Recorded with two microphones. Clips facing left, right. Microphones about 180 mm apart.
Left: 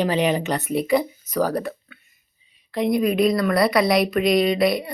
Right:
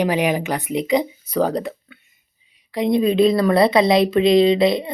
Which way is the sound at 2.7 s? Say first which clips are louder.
Right 3 dB; 20° right (ahead or behind).